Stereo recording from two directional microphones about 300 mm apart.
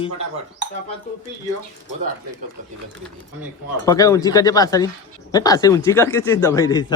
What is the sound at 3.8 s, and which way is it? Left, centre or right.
Speech, centre.